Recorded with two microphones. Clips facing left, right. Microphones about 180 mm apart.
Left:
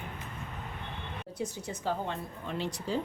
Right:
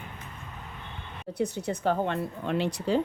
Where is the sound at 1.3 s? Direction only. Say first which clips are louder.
Right 8 dB; 65° right (ahead or behind).